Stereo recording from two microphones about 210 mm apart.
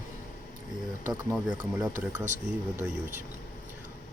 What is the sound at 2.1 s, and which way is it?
Speech, 35° right (ahead or behind).